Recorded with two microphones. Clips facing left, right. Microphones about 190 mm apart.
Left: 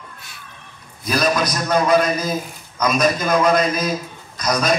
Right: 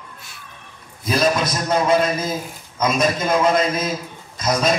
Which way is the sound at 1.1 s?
25° right (ahead or behind).